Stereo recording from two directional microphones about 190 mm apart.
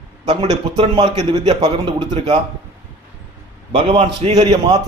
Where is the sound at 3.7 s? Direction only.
35° right (ahead or behind).